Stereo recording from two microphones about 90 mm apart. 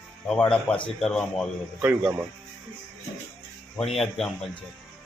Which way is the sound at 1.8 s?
20° right (ahead or behind).